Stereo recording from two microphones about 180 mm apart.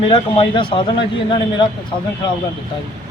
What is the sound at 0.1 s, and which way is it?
A man's voice, 30° left (ahead or behind).